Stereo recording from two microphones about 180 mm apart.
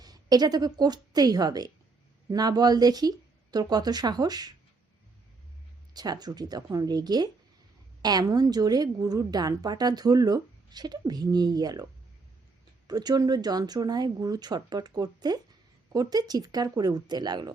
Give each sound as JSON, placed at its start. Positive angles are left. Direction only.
{"t": 0.0, "sound": "a woman's voice", "side_deg": -20}
{"t": 5.9, "sound": "a woman's voice", "side_deg": -20}
{"t": 12.9, "sound": "a woman's voice", "side_deg": -20}